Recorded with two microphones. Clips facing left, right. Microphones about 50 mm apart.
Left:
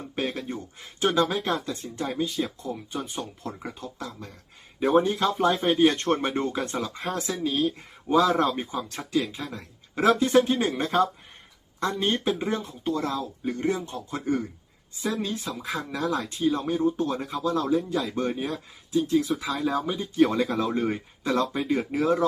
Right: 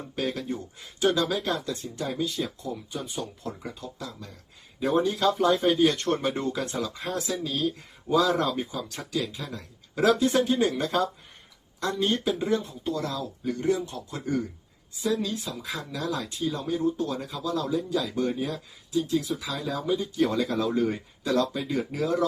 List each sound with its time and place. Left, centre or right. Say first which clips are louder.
0.2 s speech: even; left